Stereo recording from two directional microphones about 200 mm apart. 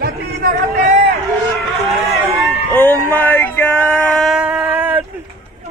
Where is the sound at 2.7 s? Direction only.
10° left (ahead or behind); by 5.0 s 5° right (ahead or behind).